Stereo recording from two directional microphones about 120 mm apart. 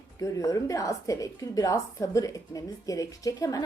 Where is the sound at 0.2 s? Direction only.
25° left (ahead or behind).